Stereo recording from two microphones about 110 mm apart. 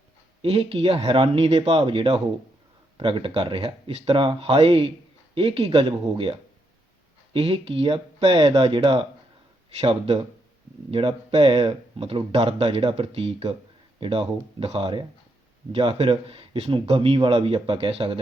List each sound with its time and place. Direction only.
0.4 s speech: 60° right (ahead or behind)